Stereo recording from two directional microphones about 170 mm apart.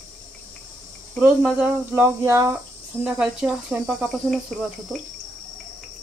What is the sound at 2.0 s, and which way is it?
Speech, 15° right (ahead or behind).